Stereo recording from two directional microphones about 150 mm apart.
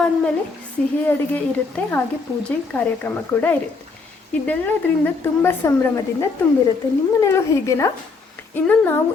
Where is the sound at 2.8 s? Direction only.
10° left (ahead or behind).